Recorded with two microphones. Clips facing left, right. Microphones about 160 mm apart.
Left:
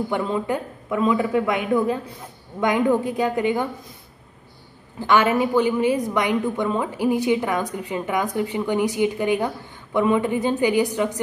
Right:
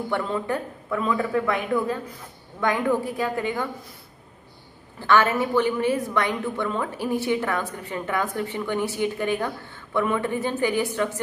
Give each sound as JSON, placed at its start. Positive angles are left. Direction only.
{"t": 0.1, "sound": "a woman's voice", "side_deg": 15}
{"t": 5.0, "sound": "a woman's voice", "side_deg": 15}